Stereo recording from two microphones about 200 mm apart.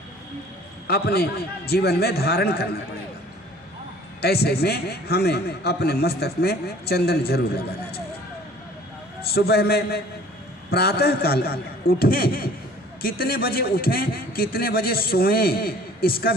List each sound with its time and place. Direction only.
0.9 s a man's voice: 55° left (ahead or behind)
4.2 s a man's voice: 50° left (ahead or behind)
9.3 s a man's voice: 50° left (ahead or behind)